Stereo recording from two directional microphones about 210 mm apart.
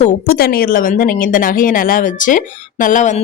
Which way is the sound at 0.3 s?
45° left (ahead or behind).